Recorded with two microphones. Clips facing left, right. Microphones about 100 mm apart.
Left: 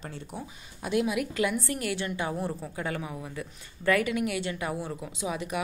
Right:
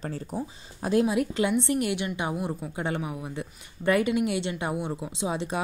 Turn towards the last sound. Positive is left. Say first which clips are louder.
# right 3 dB
turn(degrees=-25)  # may be behind; listen again after turning